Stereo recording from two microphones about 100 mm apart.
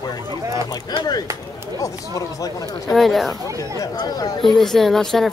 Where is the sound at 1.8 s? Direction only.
35° left (ahead or behind).